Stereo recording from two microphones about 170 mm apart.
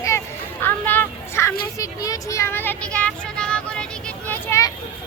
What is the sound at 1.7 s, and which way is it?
Vehicle, 20° left (ahead or behind).